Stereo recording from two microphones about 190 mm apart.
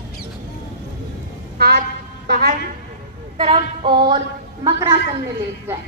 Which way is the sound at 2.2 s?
50° right (ahead or behind).